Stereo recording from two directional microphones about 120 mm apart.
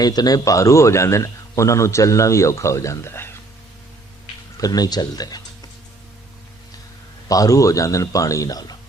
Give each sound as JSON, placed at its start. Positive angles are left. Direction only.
{"t": 0.0, "sound": "a man's voice", "side_deg": 30}
{"t": 4.5, "sound": "speech", "side_deg": 30}
{"t": 7.3, "sound": "a man's voice", "side_deg": 30}